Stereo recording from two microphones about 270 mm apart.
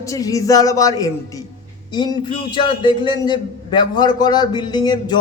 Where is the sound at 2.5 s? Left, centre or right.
Centre.